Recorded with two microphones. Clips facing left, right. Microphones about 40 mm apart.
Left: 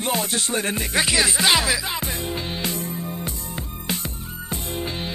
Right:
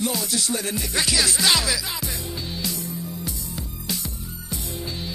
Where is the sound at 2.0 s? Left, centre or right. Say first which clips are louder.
Left 4 dB; left.